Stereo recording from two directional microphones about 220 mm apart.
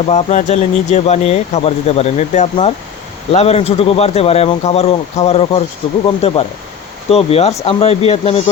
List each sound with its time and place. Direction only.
0.1 s speech: 30° left (ahead or behind)